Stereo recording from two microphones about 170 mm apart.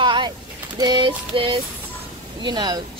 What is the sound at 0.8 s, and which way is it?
Female singing, 25° right (ahead or behind).